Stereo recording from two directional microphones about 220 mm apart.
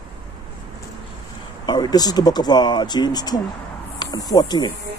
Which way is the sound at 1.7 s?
20° left (ahead or behind).